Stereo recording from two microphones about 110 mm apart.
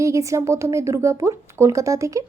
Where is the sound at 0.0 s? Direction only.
30° right (ahead or behind).